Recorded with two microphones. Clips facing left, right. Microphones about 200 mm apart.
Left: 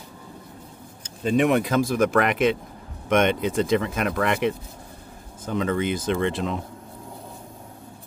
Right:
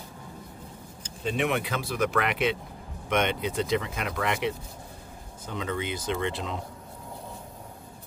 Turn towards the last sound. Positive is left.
turn(degrees=50)  # may be behind; listen again after turning